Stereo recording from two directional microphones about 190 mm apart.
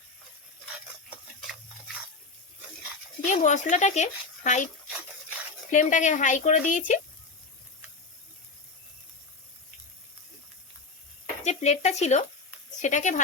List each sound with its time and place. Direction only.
3.2 s a child's voice: 40° left (ahead or behind)
5.7 s a child's voice: 40° left (ahead or behind)
11.4 s a child's voice: 35° left (ahead or behind)